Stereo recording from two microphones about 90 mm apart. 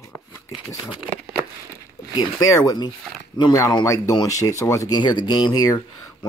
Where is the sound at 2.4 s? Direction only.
45° left (ahead or behind).